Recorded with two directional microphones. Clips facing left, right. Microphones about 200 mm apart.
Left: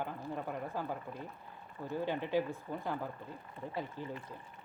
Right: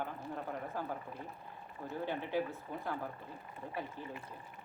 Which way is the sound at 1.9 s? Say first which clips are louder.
Left 3 dB; 15° left (ahead or behind).